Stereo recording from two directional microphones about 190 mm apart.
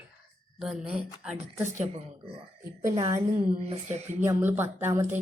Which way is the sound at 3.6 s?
35° right (ahead or behind).